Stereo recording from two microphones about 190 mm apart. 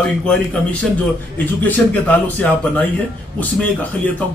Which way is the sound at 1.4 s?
10° left (ahead or behind).